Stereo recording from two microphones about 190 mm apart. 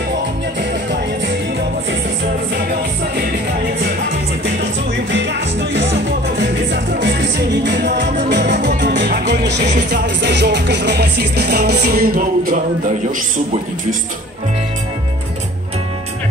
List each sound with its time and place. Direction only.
5.1 s music: 70° right (ahead or behind)